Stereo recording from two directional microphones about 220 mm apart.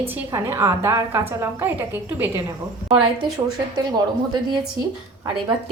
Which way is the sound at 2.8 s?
20° right (ahead or behind).